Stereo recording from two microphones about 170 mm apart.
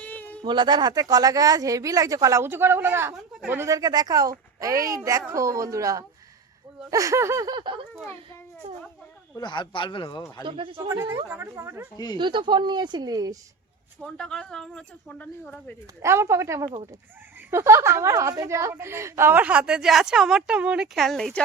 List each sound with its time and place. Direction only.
0.0 s a sound: 10° left (ahead or behind)
0.4 s speech: 25° right (ahead or behind)
8.6 s a sound: 35° right (ahead or behind)
9.3 s speech: 25° left (ahead or behind)
10.4 s speech: 30° right (ahead or behind)
11.3 s a woman's voice: 15° right (ahead or behind)
12.1 s speech: 30° right (ahead or behind)
14.0 s speech: 5° left (ahead or behind)
16.0 s a woman's voice: 15° right (ahead or behind); by 21.4 s centre (ahead or behind)